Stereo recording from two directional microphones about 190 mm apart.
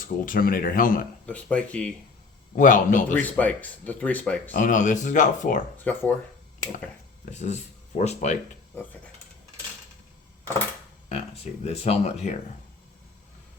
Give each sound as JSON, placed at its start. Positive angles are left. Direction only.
{"t": 0.0, "sound": "speech", "side_deg": 45}
{"t": 1.3, "sound": "speech", "side_deg": 5}
{"t": 2.6, "sound": "speech", "side_deg": 45}
{"t": 3.1, "sound": "speech", "side_deg": 10}
{"t": 4.5, "sound": "speech", "side_deg": 40}
{"t": 5.7, "sound": "speech", "side_deg": 10}
{"t": 7.3, "sound": "speech", "side_deg": 35}
{"t": 8.7, "sound": "speech", "side_deg": 10}
{"t": 11.6, "sound": "speech", "side_deg": 35}